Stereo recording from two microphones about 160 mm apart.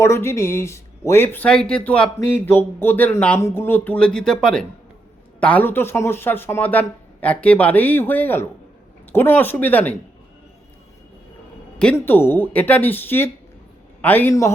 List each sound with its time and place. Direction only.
0.0 s speech: 15° left (ahead or behind)
11.9 s speech: 15° left (ahead or behind)